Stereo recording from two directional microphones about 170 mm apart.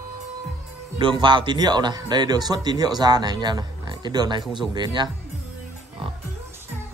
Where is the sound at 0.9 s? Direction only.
25° right (ahead or behind).